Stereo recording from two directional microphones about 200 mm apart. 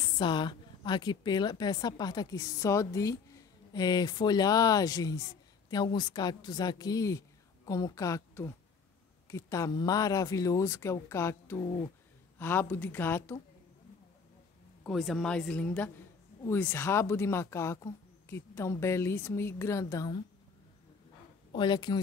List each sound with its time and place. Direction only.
0.0 s a woman's voice: 25° left (ahead or behind)
12.4 s speech: 10° left (ahead or behind)
14.8 s a woman's voice: centre (ahead or behind); by 20.2 s 15° left (ahead or behind)
21.5 s a woman's voice: 20° left (ahead or behind)